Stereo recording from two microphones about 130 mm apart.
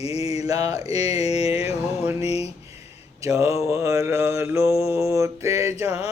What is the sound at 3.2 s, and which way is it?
Mantra, 25° right (ahead or behind).